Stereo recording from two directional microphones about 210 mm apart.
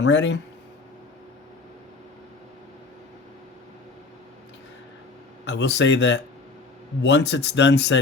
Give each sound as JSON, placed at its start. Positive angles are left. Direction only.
{"t": 0.0, "sound": "speech", "side_deg": 60}
{"t": 5.5, "sound": "speech", "side_deg": 55}